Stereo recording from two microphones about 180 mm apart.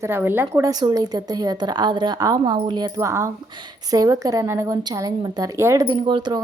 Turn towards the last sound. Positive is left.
turn(degrees=-25)  # may be behind; listen again after turning